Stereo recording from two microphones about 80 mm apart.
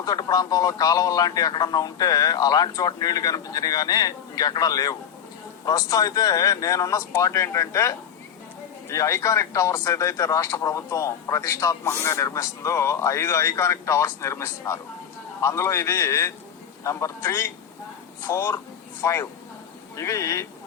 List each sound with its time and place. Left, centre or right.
0.0 s speech: left